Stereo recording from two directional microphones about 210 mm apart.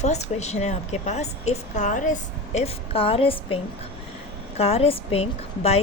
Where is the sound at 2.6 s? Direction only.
25° left (ahead or behind).